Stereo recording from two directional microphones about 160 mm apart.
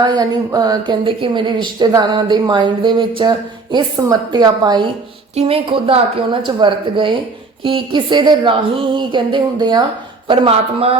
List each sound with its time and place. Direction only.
0.0 s speech: 25° right (ahead or behind)
5.3 s speech: 40° right (ahead or behind)